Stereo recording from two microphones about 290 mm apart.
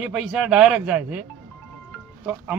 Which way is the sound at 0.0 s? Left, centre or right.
Centre.